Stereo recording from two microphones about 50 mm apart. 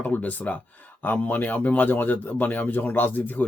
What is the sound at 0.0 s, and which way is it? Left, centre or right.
A man's voice, left.